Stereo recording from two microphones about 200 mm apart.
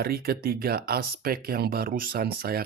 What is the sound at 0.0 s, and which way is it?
Speech, 50° right (ahead or behind).